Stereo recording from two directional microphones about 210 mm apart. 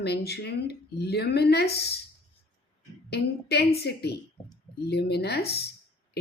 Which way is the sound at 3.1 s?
50° left (ahead or behind).